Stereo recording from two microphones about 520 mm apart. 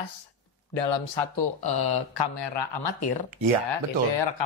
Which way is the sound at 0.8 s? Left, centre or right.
Left.